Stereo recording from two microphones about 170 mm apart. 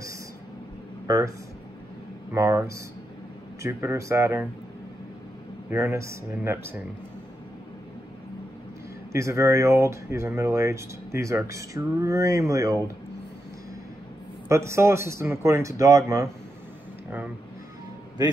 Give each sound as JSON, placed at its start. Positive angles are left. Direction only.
{"t": 1.0, "sound": "speech", "side_deg": -20}
{"t": 2.3, "sound": "speech", "side_deg": -15}
{"t": 5.7, "sound": "speech", "side_deg": -15}
{"t": 9.1, "sound": "speech", "side_deg": -15}
{"t": 14.5, "sound": "speech", "side_deg": -15}